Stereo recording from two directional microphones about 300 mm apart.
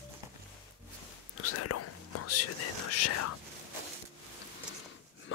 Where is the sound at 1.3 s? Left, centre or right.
Left.